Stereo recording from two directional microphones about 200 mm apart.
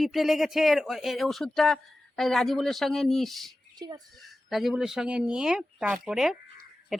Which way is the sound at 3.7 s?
20° right (ahead or behind).